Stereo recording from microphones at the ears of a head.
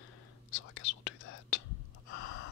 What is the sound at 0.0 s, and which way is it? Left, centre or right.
Whispering, left.